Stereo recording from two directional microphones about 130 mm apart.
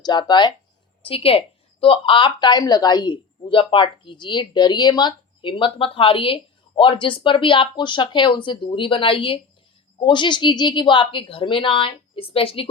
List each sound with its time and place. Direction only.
0.0 s speech: 35° left (ahead or behind)
1.0 s speech: 45° left (ahead or behind)